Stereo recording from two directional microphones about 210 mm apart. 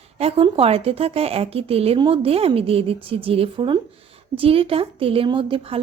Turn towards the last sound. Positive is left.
turn(degrees=-25)  # may be behind; listen again after turning